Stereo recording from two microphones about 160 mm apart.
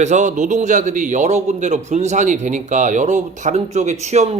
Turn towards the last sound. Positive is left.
turn(degrees=-45)  # may be behind; listen again after turning